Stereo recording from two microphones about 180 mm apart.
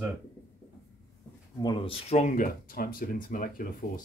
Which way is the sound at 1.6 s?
30° left (ahead or behind).